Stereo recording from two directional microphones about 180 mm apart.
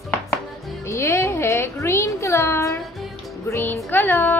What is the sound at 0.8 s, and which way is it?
Speech, 15° left (ahead or behind).